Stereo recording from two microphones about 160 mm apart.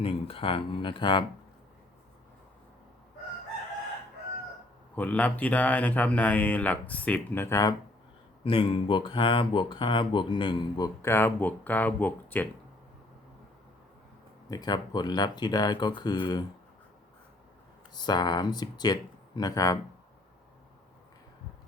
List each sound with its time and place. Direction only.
0.0 s speech: 35° left (ahead or behind)
4.9 s speech: 10° left (ahead or behind)
8.4 s speech: 35° left (ahead or behind); by 12.5 s 10° left (ahead or behind)
14.5 s speech: 25° left (ahead or behind)
17.9 s speech: 25° left (ahead or behind)